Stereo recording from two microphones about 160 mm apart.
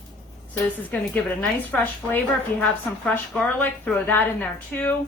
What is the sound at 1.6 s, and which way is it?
A woman's voice, 10° left (ahead or behind).